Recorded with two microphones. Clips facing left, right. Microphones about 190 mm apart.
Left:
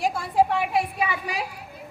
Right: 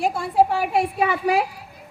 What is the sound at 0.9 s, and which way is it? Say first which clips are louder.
Speech: right 8 dB; 55° right (ahead or behind).